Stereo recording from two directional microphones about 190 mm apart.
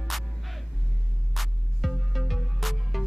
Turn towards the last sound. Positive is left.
turn(degrees=0)  # may be behind; listen again after turning